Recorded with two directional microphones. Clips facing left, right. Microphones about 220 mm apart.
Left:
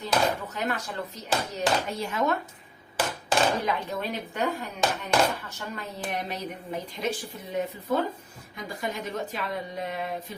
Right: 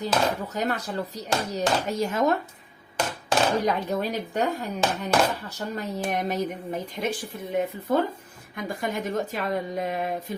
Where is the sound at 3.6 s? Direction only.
40° right (ahead or behind).